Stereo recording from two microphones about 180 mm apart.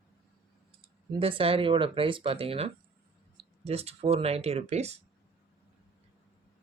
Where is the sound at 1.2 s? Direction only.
30° right (ahead or behind).